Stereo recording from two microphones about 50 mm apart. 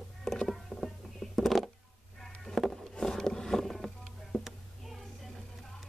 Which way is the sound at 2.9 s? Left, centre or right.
Centre.